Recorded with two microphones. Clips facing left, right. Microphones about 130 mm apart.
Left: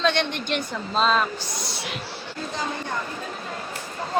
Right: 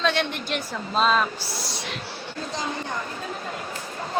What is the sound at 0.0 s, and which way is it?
A woman's voice, 5° right (ahead or behind).